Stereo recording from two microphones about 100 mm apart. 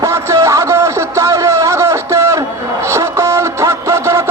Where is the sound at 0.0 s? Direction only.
30° right (ahead or behind).